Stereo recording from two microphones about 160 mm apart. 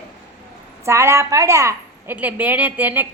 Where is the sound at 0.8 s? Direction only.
15° right (ahead or behind).